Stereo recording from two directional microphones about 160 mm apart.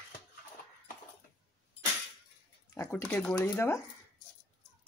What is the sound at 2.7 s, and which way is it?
Speech, 15° left (ahead or behind).